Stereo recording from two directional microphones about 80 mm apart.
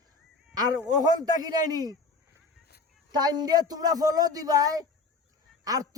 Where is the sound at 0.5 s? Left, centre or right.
Right.